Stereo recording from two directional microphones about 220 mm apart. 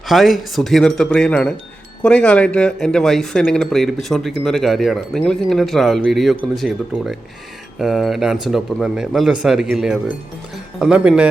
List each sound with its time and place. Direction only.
0.1 s speech: centre (ahead or behind)